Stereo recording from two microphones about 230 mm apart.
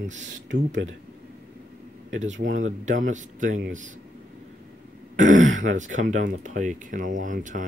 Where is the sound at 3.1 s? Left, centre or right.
Right.